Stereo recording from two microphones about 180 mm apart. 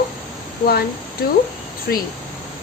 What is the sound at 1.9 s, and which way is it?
Speech, 65° left (ahead or behind).